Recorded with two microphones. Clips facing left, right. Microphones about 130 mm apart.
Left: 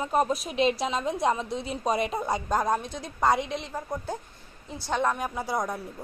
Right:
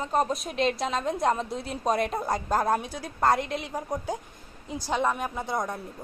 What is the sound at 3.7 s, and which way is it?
Speech, 15° right (ahead or behind).